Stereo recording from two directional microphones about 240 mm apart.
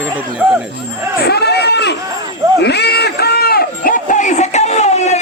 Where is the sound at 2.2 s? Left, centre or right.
Centre.